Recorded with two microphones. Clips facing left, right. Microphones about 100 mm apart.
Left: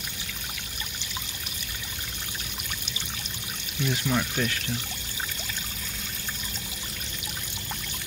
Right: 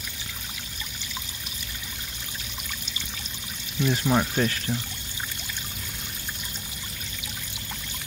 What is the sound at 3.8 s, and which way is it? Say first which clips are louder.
Speech: right 4 dB; 40° right (ahead or behind).